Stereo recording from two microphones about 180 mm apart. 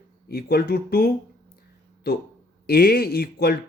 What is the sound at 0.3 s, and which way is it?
Speech, 60° left (ahead or behind).